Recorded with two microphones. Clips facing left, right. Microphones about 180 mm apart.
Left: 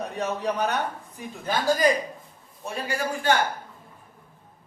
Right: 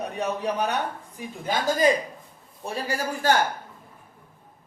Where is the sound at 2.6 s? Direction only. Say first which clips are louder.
Even; 35° right (ahead or behind).